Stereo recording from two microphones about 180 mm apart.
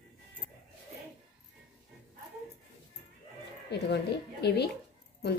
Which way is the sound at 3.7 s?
65° left (ahead or behind).